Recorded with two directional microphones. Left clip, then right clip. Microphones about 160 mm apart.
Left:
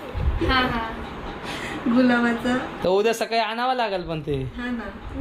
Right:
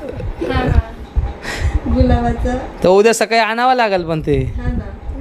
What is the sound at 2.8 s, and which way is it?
A man's voice, 90° right.